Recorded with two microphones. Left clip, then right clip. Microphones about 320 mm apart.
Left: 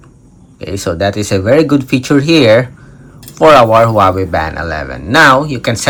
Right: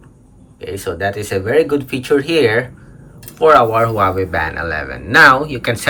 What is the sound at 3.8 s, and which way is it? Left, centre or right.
Speech, centre.